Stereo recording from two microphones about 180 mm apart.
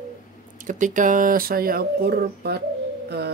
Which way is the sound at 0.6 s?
45° right (ahead or behind).